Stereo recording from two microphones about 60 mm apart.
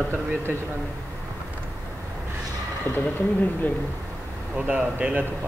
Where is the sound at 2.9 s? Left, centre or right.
Left.